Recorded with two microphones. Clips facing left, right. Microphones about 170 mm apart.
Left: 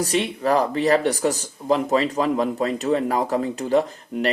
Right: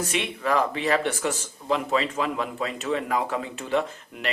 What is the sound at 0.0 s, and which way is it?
Speech, 35° left (ahead or behind).